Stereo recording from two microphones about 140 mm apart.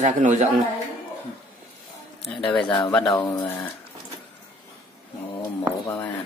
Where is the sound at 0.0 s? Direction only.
60° right (ahead or behind).